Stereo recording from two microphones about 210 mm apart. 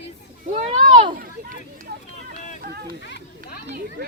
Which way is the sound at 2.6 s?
45° right (ahead or behind).